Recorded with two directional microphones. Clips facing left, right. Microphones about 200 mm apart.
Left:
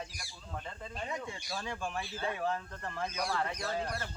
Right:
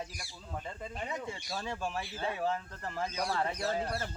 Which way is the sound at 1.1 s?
Centre (ahead or behind).